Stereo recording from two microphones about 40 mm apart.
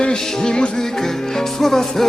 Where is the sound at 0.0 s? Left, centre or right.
Centre.